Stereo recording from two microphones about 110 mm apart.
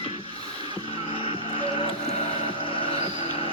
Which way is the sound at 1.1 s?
55° left (ahead or behind).